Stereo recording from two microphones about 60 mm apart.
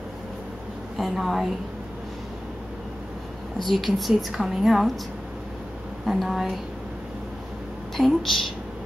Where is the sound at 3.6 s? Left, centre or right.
Centre.